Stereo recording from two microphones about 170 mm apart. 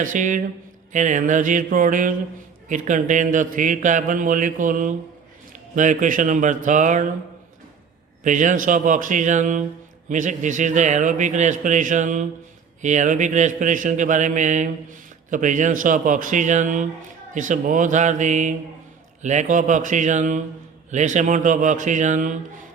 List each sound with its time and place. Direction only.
0.0 s a man's voice: 50° right (ahead or behind)
8.2 s a man's voice: 50° right (ahead or behind)